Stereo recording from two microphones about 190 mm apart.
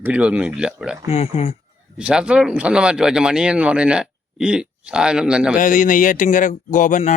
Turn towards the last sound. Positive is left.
turn(degrees=40)  # may be behind; listen again after turning